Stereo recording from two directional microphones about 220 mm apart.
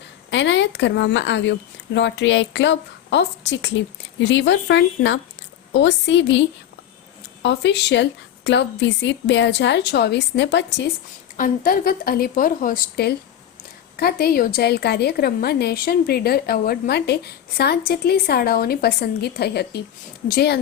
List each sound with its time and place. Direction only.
0.3 s a woman's voice: 55° left (ahead or behind)
7.4 s a woman's voice: 50° left (ahead or behind)
11.3 s a woman's voice: 40° left (ahead or behind)